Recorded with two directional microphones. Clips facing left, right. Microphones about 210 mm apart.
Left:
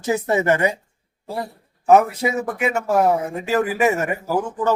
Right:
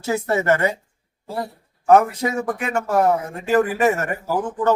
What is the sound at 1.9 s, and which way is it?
Speech, 10° left (ahead or behind).